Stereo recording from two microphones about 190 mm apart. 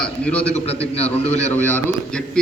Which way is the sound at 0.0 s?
5° left (ahead or behind).